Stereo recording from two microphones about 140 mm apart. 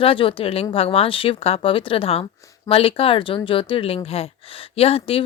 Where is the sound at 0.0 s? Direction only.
40° left (ahead or behind).